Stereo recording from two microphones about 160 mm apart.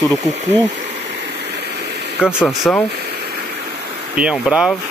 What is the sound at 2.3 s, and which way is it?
Speech, 5° right (ahead or behind).